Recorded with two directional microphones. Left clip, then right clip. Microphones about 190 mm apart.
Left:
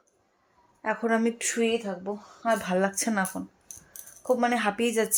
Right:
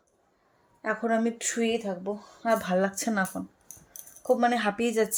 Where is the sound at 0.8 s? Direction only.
Centre (ahead or behind).